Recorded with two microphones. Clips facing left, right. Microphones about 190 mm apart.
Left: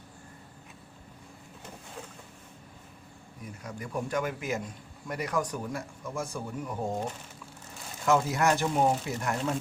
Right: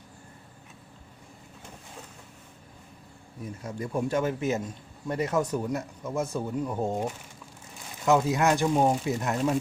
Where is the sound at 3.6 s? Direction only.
25° right (ahead or behind).